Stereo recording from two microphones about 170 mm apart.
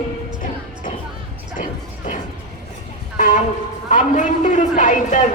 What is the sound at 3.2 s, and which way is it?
A man's voice, 50° left (ahead or behind).